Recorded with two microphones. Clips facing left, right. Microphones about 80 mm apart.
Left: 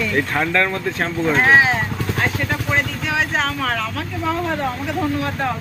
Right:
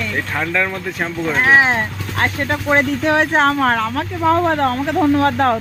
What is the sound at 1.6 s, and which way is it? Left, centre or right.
Speech, right.